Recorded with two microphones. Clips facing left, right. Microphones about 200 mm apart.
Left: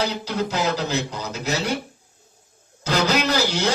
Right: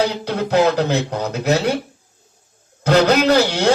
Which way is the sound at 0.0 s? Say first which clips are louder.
Right 4 dB; 60° right (ahead or behind).